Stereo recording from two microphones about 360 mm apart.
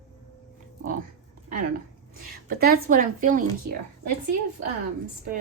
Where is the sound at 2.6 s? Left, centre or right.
Right.